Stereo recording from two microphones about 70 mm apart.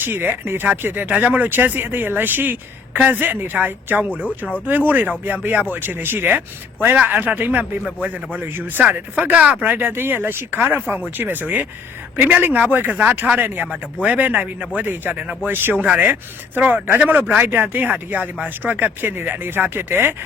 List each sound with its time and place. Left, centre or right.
0.0 s speech: right
4.1 s speech: centre
4.6 s speech: right
8.8 s speech: centre